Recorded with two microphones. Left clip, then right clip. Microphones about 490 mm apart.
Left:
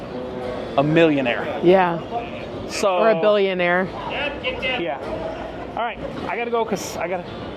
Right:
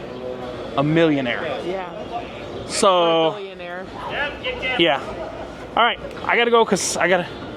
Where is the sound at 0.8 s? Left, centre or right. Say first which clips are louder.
Left 1 dB; centre.